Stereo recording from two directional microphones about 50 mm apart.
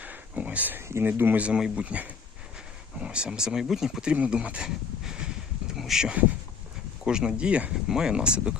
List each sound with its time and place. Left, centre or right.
0.0 s a sound: right
0.8 s speech: right
1.0 s speech: right
1.4 s speech: right
4.0 s speech: right
5.7 s a sound: centre
7.0 s speech: centre